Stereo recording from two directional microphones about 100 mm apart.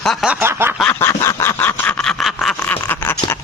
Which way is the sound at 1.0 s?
30° left (ahead or behind).